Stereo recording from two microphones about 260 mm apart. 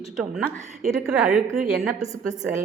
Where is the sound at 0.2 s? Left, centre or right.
Centre.